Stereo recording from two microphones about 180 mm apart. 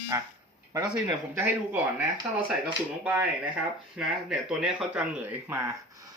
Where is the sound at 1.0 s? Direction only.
15° right (ahead or behind).